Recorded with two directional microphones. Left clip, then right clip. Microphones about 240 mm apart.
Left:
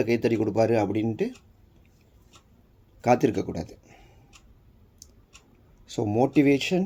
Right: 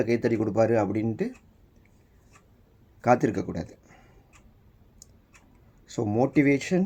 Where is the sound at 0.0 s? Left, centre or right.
Centre.